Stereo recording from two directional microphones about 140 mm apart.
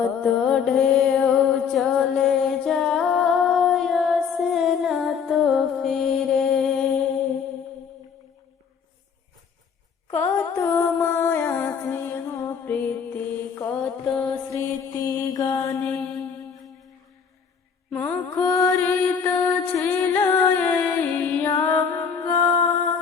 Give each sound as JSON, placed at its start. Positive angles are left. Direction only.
{"t": 0.0, "sound": "mantra", "side_deg": 5}
{"t": 10.1, "sound": "music", "side_deg": 15}
{"t": 14.5, "sound": "mantra", "side_deg": 25}
{"t": 17.9, "sound": "mantra", "side_deg": 15}
{"t": 19.2, "sound": "music", "side_deg": 15}